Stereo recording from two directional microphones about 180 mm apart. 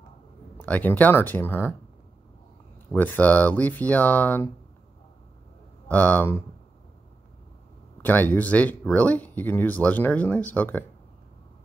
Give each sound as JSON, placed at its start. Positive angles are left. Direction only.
{"t": 0.6, "sound": "speech", "side_deg": 10}
{"t": 2.9, "sound": "speech", "side_deg": 10}
{"t": 5.9, "sound": "speech", "side_deg": 10}
{"t": 8.0, "sound": "speech", "side_deg": 10}